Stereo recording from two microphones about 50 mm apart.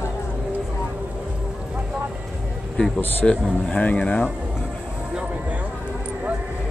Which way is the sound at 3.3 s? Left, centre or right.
Left.